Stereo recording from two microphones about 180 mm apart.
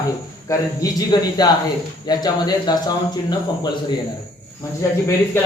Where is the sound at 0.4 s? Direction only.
20° left (ahead or behind).